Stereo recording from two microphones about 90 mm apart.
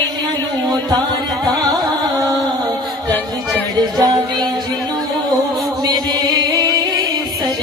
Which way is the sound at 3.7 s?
50° right (ahead or behind).